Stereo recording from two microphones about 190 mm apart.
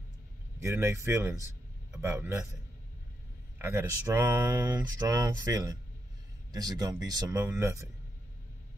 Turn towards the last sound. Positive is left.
turn(degrees=-15)  # may be behind; listen again after turning